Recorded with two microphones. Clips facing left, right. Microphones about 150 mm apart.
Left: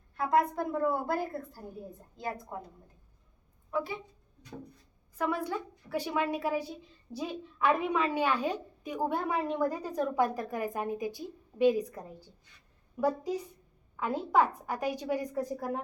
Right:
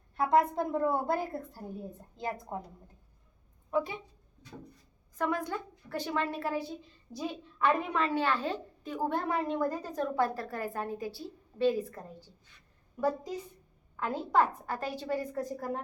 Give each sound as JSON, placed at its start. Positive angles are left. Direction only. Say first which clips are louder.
{"t": 0.3, "sound": "a woman's voice", "louder": "right 1 dB", "side_deg": -25}
{"t": 2.5, "sound": "a woman's voice", "louder": "right 2 dB", "side_deg": -30}
{"t": 3.7, "sound": "a woman's voice", "louder": "right 2 dB", "side_deg": -20}
{"t": 5.1, "sound": "a woman's voice", "louder": "even", "side_deg": 5}